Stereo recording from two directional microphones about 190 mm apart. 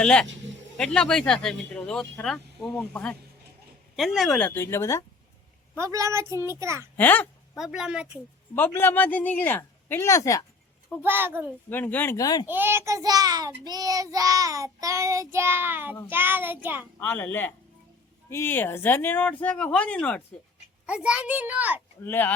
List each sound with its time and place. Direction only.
0.0 s speech: 5° left (ahead or behind)
5.7 s child singing: 15° right (ahead or behind)
6.9 s a sound: 10° left (ahead or behind)
7.6 s speech: 5° right (ahead or behind)
8.5 s speech: 10° left (ahead or behind)
11.0 s child singing: 10° right (ahead or behind)
11.7 s speech: 10° left (ahead or behind)
12.5 s child singing: 10° right (ahead or behind)
17.0 s speech: 10° left (ahead or behind)
20.8 s child singing: 5° right (ahead or behind)
22.0 s speech: 10° left (ahead or behind)